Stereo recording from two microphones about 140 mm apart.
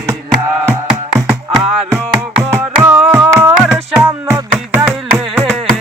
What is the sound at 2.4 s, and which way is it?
Music, 10° right (ahead or behind).